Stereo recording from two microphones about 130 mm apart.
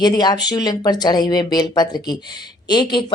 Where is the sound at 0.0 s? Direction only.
30° left (ahead or behind).